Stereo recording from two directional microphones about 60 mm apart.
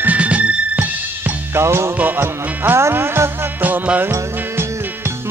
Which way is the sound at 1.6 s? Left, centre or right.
Right.